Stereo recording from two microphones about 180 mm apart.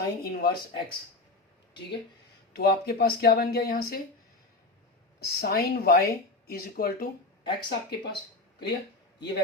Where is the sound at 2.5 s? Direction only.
65° left (ahead or behind).